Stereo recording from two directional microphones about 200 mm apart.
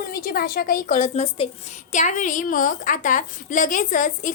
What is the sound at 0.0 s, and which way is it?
A woman's voice, 45° left (ahead or behind).